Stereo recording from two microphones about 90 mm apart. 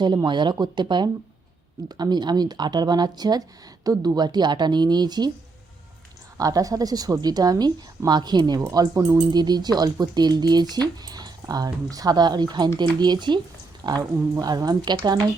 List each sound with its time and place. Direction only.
0.3 s speech: 60° right (ahead or behind)
6.3 s speech: 40° right (ahead or behind)
8.7 s speech: 40° right (ahead or behind)
9.3 s speech: 50° right (ahead or behind)